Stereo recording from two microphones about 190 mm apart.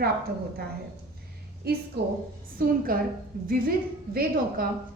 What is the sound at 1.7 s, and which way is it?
A woman's voice, 55° right (ahead or behind).